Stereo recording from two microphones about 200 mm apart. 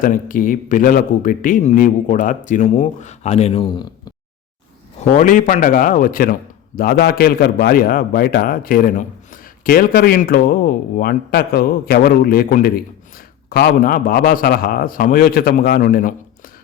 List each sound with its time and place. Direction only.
0.0 s speech: 40° left (ahead or behind); by 4.1 s 25° left (ahead or behind)
4.9 s a man's voice: 40° left (ahead or behind)